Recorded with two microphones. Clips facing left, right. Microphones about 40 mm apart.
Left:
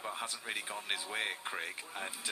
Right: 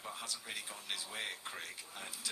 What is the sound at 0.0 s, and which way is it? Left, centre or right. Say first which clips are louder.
Speech: left 5 dB; left.